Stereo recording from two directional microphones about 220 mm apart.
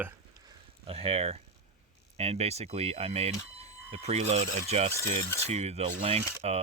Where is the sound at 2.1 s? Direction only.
30° right (ahead or behind).